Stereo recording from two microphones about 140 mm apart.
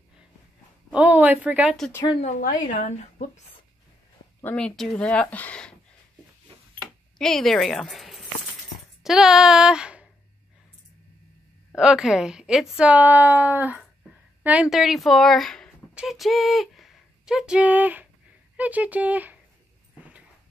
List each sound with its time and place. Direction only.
0.8 s a woman's voice: 10° right (ahead or behind)
2.2 s speech: 65° left (ahead or behind)
4.4 s speech: 10° left (ahead or behind)
7.2 s a woman's voice: 5° left (ahead or behind)
11.7 s a woman's voice: 5° right (ahead or behind)